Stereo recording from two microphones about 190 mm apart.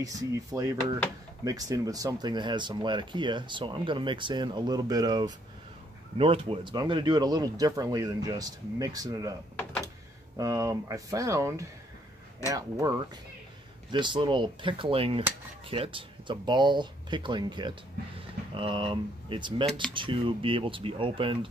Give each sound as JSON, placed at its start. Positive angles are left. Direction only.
{"t": 0.0, "sound": "speech", "side_deg": -15}
{"t": 13.9, "sound": "speech", "side_deg": -25}